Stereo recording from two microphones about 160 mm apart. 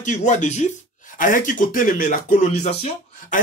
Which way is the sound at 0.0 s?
50° left (ahead or behind).